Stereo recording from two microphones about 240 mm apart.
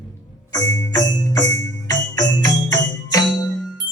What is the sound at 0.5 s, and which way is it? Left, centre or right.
Music, centre.